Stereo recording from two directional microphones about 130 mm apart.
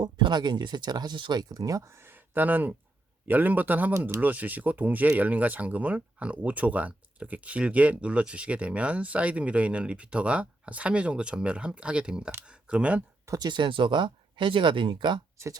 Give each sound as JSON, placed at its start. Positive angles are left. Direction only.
{"t": 0.0, "sound": "speech", "side_deg": -35}
{"t": 13.2, "sound": "speech", "side_deg": -30}